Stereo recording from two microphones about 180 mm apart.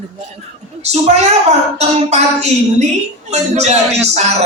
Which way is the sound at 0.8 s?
35° right (ahead or behind).